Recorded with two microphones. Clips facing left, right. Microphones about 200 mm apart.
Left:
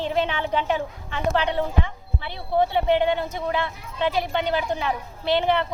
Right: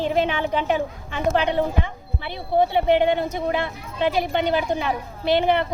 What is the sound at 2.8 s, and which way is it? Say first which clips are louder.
A woman's voice: right 2 dB; 15° right (ahead or behind).